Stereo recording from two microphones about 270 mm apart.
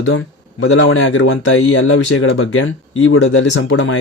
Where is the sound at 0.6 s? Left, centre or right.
Left.